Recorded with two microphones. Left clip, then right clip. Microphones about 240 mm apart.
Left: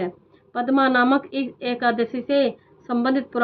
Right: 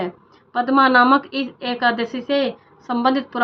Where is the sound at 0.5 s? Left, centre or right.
Centre.